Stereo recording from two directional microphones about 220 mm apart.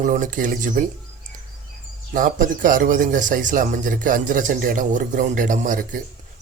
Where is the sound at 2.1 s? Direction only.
35° right (ahead or behind).